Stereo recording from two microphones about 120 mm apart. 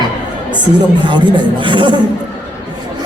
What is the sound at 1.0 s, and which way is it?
Speech, 40° right (ahead or behind).